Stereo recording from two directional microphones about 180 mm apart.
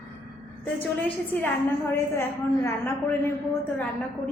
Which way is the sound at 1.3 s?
10° left (ahead or behind).